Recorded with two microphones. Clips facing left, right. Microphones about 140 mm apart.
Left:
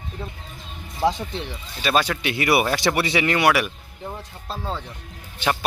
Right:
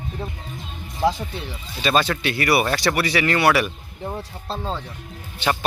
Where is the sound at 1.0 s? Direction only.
20° left (ahead or behind).